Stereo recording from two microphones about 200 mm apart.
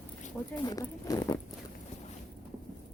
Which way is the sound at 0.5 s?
20° left (ahead or behind).